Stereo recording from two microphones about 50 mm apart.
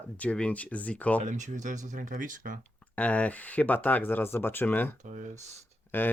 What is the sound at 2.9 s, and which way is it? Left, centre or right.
Speech, left.